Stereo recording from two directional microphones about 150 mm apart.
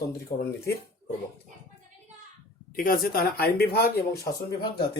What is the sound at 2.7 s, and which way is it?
Speech, 70° left (ahead or behind).